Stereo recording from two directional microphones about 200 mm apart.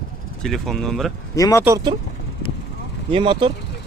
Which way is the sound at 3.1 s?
25° right (ahead or behind).